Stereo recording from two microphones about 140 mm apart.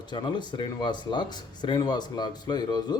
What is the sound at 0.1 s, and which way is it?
A man's voice, 35° left (ahead or behind).